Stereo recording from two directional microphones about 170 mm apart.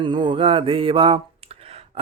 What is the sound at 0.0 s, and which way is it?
Mantra, 25° right (ahead or behind).